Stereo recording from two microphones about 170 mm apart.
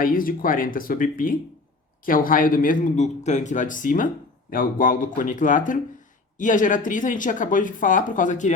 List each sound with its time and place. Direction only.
0.0 s speech: 55° left (ahead or behind)